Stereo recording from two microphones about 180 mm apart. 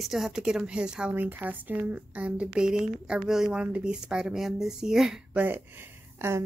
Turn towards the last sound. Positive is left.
turn(degrees=-15)  # may be behind; listen again after turning